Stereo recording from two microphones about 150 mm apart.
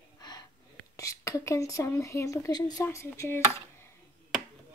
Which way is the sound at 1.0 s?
20° left (ahead or behind).